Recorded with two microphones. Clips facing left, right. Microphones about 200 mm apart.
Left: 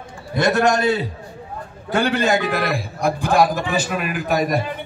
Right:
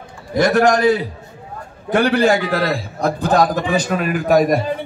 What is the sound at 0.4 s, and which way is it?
A man's voice, 25° left (ahead or behind).